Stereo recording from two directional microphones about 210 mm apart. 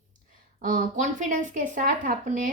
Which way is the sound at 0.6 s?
40° right (ahead or behind).